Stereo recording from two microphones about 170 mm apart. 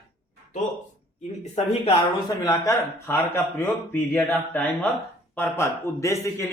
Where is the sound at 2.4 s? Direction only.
15° left (ahead or behind).